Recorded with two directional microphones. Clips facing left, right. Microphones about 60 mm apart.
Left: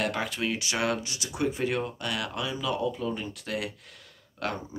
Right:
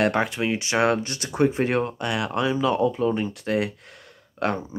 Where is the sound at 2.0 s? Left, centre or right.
Right.